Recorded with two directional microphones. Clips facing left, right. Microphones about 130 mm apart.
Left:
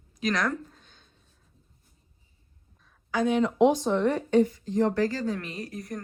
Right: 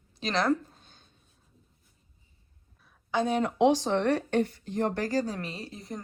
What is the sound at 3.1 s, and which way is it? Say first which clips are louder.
Speech: left 2 dB; 30° right (ahead or behind).